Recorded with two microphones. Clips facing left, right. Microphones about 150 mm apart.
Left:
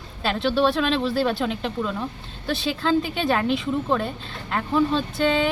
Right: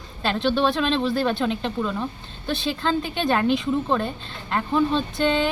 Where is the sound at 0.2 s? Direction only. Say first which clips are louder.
Even; 5° left (ahead or behind).